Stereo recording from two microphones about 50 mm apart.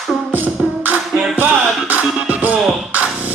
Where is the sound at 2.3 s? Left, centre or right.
Right.